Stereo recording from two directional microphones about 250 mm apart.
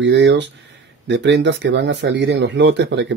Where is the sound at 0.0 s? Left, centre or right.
Right.